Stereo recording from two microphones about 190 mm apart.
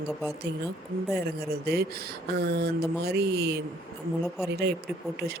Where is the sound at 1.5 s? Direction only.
55° right (ahead or behind).